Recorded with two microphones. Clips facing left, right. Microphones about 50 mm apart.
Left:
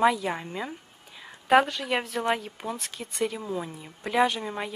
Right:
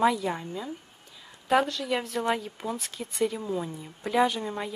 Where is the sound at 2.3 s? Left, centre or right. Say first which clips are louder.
Left 1 dB; centre.